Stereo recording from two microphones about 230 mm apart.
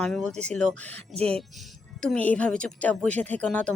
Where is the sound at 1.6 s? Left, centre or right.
Centre.